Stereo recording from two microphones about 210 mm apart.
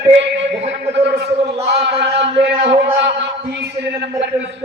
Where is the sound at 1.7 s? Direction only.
55° right (ahead or behind).